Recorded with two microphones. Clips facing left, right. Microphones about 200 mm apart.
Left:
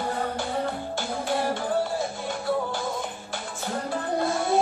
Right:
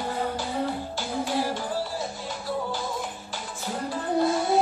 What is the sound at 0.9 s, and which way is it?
Music, 55° left (ahead or behind).